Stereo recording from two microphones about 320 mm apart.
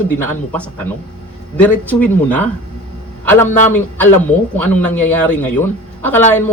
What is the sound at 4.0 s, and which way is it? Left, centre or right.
A man's voice, centre.